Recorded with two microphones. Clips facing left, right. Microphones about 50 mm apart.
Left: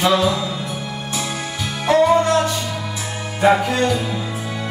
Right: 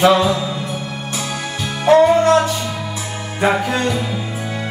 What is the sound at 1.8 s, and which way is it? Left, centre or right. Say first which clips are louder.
Music: right 3 dB; right.